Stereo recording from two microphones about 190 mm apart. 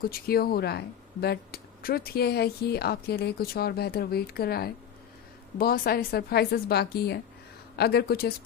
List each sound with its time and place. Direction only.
0.0 s speech: 50° left (ahead or behind)